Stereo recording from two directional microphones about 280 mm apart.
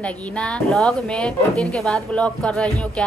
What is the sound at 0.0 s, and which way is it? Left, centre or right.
Speech, centre.